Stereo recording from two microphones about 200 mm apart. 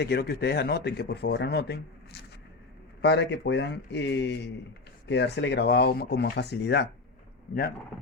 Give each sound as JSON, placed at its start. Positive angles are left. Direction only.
{"t": 0.0, "sound": "speech", "side_deg": 55}